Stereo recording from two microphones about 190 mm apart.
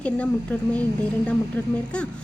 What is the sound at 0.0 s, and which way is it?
Speech, 5° left (ahead or behind).